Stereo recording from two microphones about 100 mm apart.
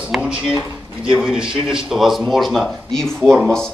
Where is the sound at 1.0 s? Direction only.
10° right (ahead or behind).